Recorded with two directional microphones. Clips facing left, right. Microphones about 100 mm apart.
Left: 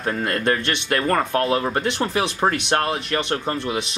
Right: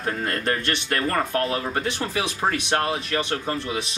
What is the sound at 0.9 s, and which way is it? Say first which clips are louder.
Speech: left 4 dB; 25° left (ahead or behind).